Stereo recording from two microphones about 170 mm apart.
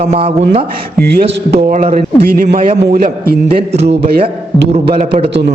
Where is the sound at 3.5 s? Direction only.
35° right (ahead or behind).